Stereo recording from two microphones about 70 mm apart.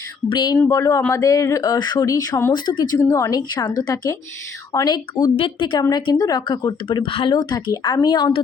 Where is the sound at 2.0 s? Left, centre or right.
Left.